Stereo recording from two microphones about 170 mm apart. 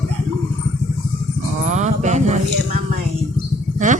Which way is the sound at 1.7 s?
45° right (ahead or behind).